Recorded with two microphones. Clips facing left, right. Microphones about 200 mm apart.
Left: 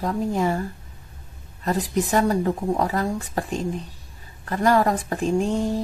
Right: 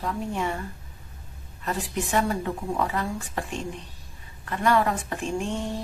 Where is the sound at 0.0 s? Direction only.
40° left (ahead or behind).